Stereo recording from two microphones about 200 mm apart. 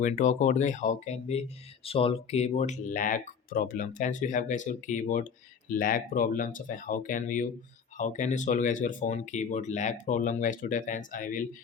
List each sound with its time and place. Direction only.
0.0 s speech: 35° left (ahead or behind)